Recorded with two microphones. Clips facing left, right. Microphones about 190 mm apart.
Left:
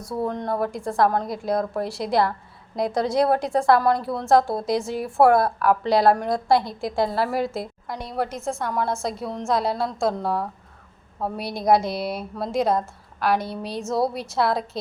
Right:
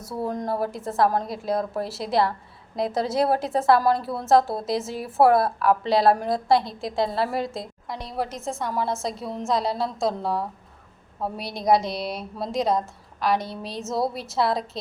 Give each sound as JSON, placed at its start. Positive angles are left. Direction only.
{"t": 0.0, "sound": "a woman's voice", "side_deg": -5}
{"t": 5.8, "sound": "a woman's voice", "side_deg": -25}
{"t": 6.2, "sound": "a woman's voice", "side_deg": 0}